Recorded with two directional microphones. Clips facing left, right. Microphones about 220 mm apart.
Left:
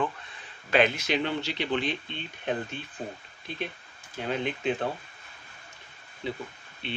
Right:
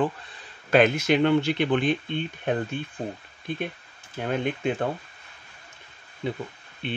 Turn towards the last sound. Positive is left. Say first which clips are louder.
# right 4 dB
turn(degrees=-50)  # may be behind; listen again after turning